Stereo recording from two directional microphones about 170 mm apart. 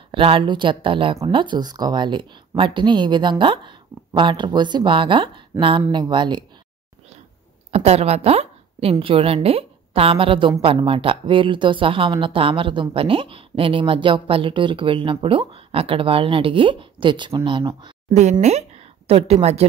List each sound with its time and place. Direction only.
0.1 s speech: 30° right (ahead or behind)
7.7 s a woman's voice: 40° right (ahead or behind)
18.4 s a woman's voice: 40° right (ahead or behind)